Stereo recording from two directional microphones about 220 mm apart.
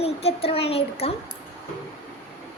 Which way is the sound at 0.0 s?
25° left (ahead or behind).